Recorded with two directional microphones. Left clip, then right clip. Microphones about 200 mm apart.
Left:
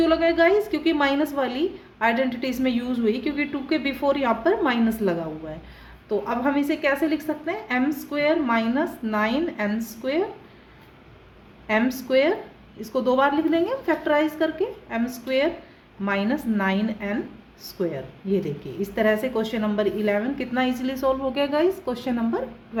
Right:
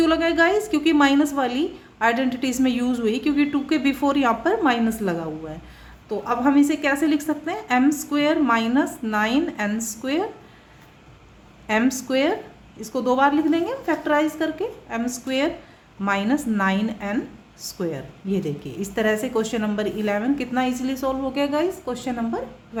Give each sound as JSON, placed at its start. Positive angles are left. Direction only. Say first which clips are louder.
{"t": 0.0, "sound": "speech", "louder": "even", "side_deg": -25}
{"t": 11.7, "sound": "a woman's voice", "louder": "even", "side_deg": -20}